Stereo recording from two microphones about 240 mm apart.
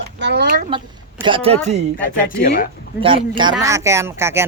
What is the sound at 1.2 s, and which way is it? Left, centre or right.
Speech, right.